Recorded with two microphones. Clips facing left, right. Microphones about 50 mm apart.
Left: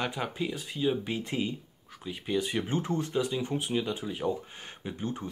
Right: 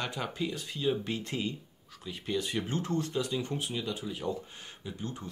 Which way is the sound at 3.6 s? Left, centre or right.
Left.